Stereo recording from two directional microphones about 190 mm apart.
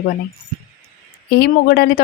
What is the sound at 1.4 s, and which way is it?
Speech, 55° left (ahead or behind).